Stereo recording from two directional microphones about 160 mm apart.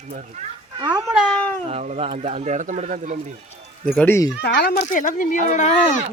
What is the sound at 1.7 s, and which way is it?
Speech, 40° right (ahead or behind).